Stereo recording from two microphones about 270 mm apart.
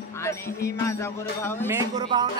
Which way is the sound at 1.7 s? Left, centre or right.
Centre.